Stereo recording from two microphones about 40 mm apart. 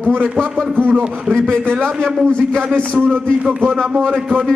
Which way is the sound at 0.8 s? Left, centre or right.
Right.